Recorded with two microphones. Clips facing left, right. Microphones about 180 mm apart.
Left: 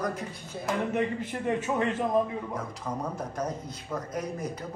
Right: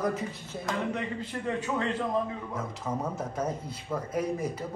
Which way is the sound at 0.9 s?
15° left (ahead or behind).